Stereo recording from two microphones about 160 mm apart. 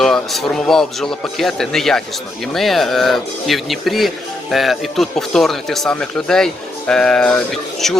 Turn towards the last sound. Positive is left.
turn(degrees=0)  # may be behind; listen again after turning